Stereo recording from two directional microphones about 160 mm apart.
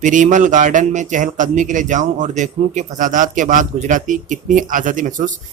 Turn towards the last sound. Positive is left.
turn(degrees=-55)  # may be behind; listen again after turning